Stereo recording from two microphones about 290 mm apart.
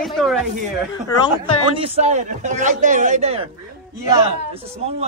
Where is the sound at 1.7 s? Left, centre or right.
Centre.